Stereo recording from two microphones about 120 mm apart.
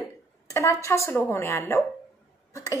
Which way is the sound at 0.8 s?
25° left (ahead or behind).